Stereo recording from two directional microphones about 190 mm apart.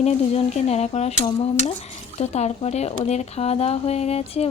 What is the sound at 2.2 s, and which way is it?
Speech, 35° left (ahead or behind).